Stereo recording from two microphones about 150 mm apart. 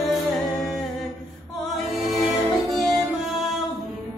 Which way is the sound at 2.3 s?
20° left (ahead or behind).